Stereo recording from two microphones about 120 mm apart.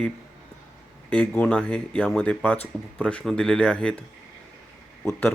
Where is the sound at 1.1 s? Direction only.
10° left (ahead or behind).